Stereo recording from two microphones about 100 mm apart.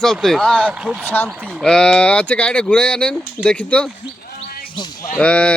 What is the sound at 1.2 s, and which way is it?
Speech, 5° left (ahead or behind).